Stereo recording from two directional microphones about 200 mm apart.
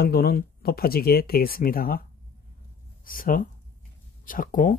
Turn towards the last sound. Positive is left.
turn(degrees=45)  # may be behind; listen again after turning